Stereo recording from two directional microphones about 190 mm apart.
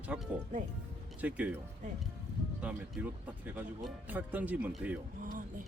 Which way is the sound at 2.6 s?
5° right (ahead or behind).